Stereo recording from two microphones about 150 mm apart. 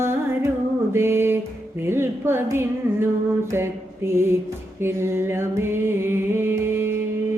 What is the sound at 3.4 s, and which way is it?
Mantra, 15° right (ahead or behind).